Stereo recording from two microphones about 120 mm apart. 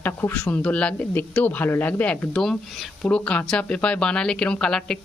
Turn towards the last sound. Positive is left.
turn(degrees=5)  # may be behind; listen again after turning